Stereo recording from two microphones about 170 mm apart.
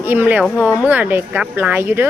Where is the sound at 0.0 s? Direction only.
10° right (ahead or behind).